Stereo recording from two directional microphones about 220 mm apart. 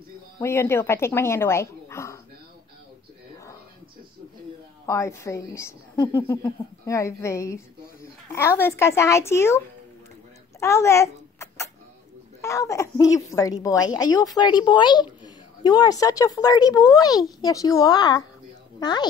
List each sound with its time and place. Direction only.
0.4 s a woman's voice: 10° left (ahead or behind)
4.8 s a woman's voice: 15° left (ahead or behind)
10.6 s a sound: 15° left (ahead or behind)
12.4 s a woman's voice: 15° left (ahead or behind)